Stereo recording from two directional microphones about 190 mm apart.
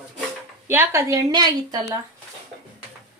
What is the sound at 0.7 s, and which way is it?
A woman's voice, 15° right (ahead or behind).